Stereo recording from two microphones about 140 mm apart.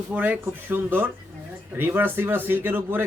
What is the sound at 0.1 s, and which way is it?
Speech, 10° right (ahead or behind).